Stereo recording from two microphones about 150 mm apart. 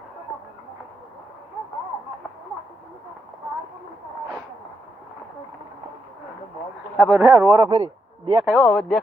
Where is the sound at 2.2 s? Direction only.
5° left (ahead or behind).